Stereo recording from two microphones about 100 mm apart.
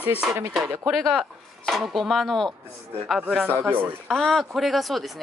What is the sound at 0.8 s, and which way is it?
Speech, centre (ahead or behind).